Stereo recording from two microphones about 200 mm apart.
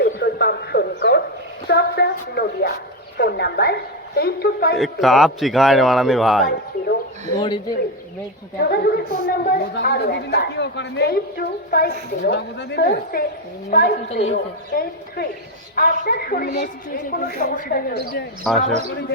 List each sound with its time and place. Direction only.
0.0 s a sound: 55° left (ahead or behind)
3.2 s a woman's voice: 55° left (ahead or behind)
4.8 s a man's voice: centre (ahead or behind)
7.3 s speech: 20° left (ahead or behind)
8.5 s a woman's voice: 55° left (ahead or behind)
14.1 s a woman's voice: 30° left (ahead or behind)
14.7 s a woman's voice: 50° left (ahead or behind)
18.5 s a man's voice: centre (ahead or behind)